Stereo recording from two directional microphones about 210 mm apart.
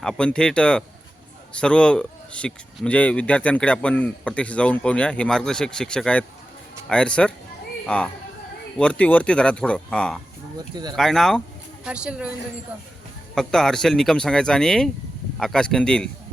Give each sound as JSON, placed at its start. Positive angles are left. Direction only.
{"t": 0.0, "sound": "speech", "side_deg": 5}
{"t": 13.3, "sound": "speech", "side_deg": 5}